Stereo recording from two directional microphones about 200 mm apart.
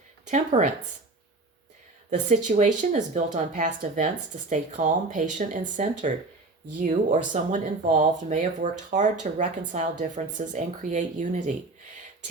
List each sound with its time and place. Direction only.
0.3 s speech: 35° right (ahead or behind)
2.0 s speech: 40° right (ahead or behind)